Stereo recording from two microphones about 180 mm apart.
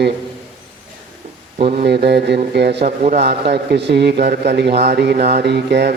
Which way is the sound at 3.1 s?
65° right (ahead or behind).